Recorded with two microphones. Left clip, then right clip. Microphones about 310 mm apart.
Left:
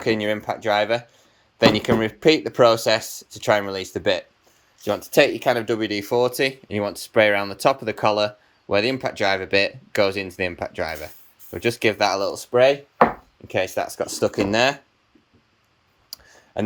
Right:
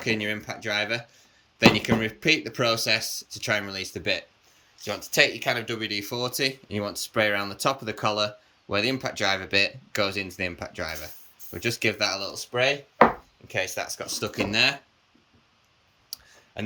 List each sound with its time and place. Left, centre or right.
0.0 s speech: centre
4.8 s speech: left
16.0 s clicking: centre